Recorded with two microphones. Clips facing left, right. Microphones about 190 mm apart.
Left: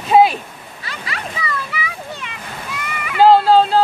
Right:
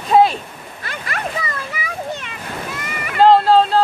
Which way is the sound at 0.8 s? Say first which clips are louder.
Right 3 dB; 50° right (ahead or behind).